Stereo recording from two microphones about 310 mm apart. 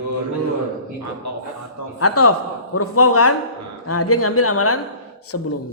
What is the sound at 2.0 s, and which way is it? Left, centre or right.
Speech, left.